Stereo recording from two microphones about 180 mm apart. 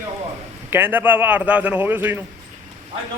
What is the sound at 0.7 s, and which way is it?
A man's voice, 10° right (ahead or behind).